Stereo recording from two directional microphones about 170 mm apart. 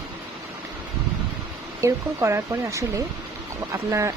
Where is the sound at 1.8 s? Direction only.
15° right (ahead or behind).